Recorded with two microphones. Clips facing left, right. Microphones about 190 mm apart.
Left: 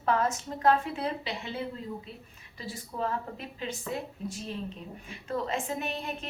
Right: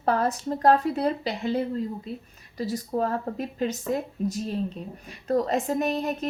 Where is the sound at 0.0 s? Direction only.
35° right (ahead or behind).